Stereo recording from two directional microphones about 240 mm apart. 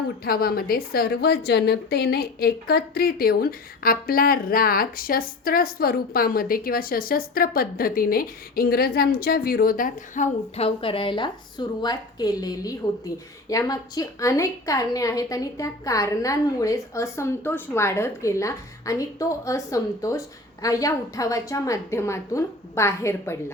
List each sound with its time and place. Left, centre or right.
0.3 s a woman's voice: left; by 23.4 s centre